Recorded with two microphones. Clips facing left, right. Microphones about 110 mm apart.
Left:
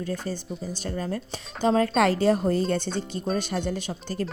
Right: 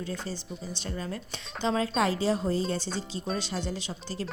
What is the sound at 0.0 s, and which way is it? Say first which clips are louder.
Speech: left 5 dB; 45° left (ahead or behind).